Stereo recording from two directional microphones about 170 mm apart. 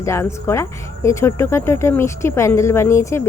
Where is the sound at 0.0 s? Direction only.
15° left (ahead or behind).